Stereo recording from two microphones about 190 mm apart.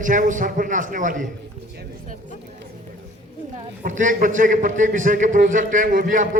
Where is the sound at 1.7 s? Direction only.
55° right (ahead or behind).